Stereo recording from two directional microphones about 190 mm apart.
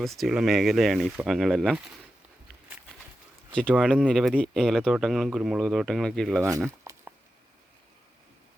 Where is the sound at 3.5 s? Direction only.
5° left (ahead or behind).